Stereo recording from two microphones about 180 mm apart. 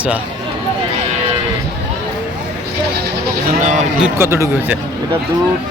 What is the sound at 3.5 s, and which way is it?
Speech, 45° right (ahead or behind).